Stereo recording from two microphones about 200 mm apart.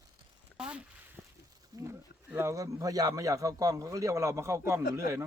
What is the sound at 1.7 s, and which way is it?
Speech, 15° right (ahead or behind).